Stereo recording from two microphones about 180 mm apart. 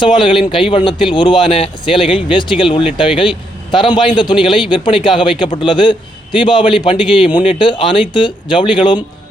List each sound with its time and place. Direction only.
0.0 s a man's voice: 25° left (ahead or behind)